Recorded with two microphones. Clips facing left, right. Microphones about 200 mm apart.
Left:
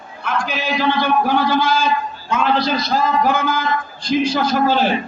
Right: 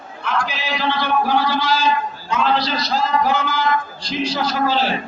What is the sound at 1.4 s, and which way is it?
A man's voice, 50° left (ahead or behind).